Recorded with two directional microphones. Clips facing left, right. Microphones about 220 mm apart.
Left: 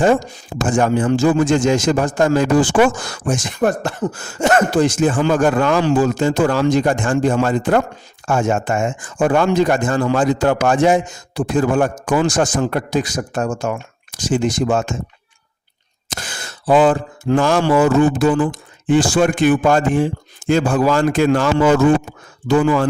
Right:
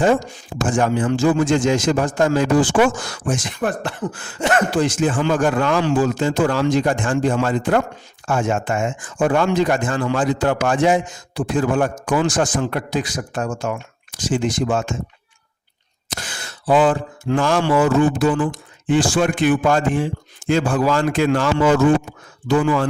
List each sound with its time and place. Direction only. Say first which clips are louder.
0.0 s speech: left 2 dB; 40° left (ahead or behind)
16.0 s speech: left 2 dB; 45° left (ahead or behind)